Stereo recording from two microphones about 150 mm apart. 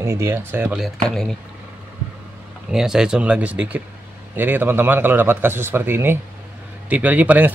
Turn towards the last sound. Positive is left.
turn(degrees=-10)  # may be behind; listen again after turning